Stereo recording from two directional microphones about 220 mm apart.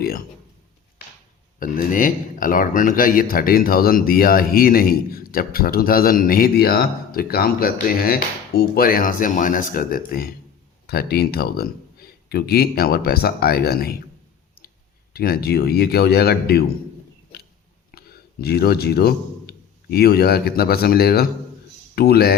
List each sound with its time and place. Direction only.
1.5 s speech: 40° left (ahead or behind)
15.1 s speech: 45° left (ahead or behind)
17.9 s speech: 45° left (ahead or behind)